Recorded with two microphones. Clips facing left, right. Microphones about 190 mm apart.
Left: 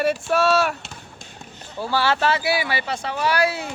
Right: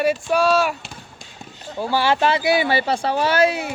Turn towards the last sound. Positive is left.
turn(degrees=-15)  # may be behind; listen again after turning